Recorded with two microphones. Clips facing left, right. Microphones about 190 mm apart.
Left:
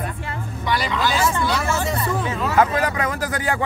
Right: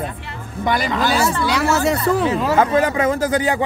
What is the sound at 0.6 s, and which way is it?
Speech, 50° right (ahead or behind).